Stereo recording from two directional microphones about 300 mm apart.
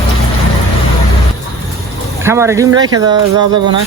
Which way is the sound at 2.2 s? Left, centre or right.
Centre.